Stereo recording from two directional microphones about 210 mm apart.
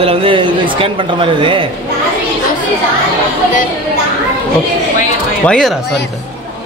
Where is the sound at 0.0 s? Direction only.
25° right (ahead or behind).